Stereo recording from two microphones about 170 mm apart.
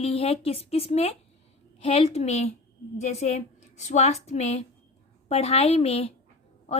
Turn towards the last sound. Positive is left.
turn(degrees=35)  # may be behind; listen again after turning